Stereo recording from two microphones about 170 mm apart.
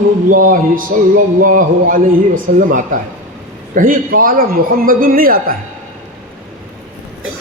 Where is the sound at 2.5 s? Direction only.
50° right (ahead or behind).